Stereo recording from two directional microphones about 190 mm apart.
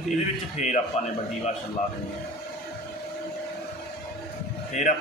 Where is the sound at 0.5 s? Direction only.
35° left (ahead or behind).